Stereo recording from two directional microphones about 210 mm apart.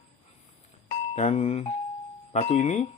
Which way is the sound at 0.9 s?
30° left (ahead or behind).